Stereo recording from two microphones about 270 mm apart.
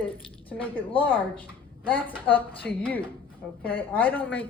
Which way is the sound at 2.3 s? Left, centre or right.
Centre.